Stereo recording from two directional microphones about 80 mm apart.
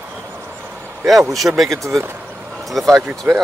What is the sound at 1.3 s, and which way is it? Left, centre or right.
Speech, centre.